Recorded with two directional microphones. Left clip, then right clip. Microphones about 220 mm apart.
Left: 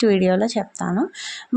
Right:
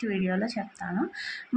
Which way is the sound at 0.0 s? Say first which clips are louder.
Left 13 dB; 45° left (ahead or behind).